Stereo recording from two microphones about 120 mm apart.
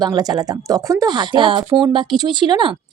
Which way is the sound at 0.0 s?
30° right (ahead or behind).